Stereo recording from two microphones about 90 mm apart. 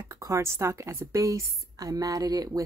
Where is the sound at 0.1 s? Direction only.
35° right (ahead or behind).